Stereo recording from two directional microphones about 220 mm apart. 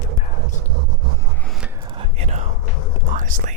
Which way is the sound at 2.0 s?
30° right (ahead or behind).